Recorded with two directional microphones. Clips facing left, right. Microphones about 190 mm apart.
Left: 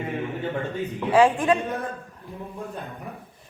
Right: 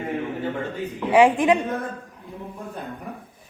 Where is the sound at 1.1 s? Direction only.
15° right (ahead or behind).